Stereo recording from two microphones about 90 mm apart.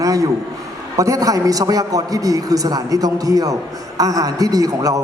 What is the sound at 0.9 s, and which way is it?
A man's voice, 35° right (ahead or behind).